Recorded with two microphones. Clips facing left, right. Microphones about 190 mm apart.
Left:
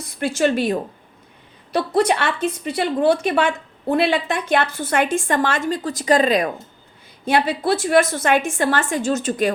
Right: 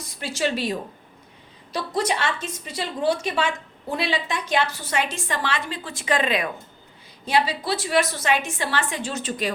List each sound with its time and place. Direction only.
0.2 s a woman's voice: 55° left (ahead or behind)
7.3 s a woman's voice: 55° left (ahead or behind)